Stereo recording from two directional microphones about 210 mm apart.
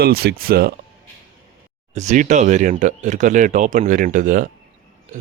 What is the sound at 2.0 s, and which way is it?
Speech, 35° right (ahead or behind).